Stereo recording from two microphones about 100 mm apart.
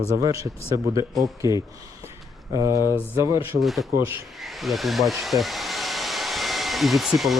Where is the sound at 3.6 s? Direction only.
Centre (ahead or behind).